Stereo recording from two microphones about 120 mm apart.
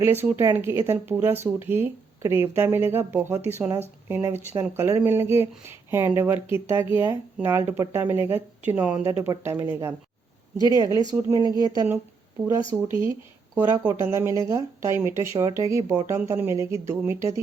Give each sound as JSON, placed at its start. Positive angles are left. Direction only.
{"t": 0.0, "sound": "speech", "side_deg": -20}
{"t": 10.6, "sound": "speech", "side_deg": 35}
{"t": 10.9, "sound": "speech", "side_deg": -25}
{"t": 12.7, "sound": "speech", "side_deg": -15}